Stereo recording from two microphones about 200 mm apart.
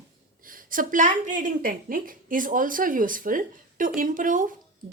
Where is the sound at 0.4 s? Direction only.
45° right (ahead or behind).